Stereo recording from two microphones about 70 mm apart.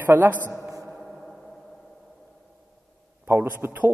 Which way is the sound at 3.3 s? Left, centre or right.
Right.